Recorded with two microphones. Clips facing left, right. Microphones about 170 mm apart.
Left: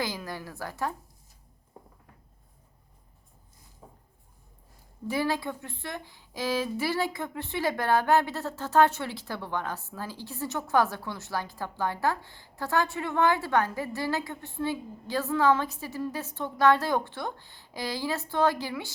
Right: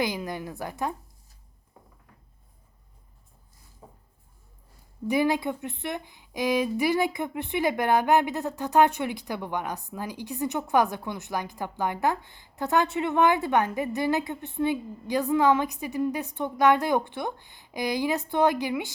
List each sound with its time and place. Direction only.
0.0 s a woman's voice: 20° right (ahead or behind)
5.0 s a woman's voice: 15° right (ahead or behind)